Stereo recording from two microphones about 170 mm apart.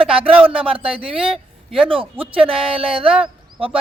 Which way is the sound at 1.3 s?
Centre (ahead or behind).